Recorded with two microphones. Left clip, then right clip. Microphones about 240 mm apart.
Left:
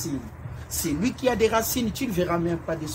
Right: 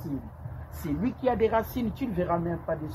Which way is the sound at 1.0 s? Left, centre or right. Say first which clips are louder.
Left 3 dB; centre.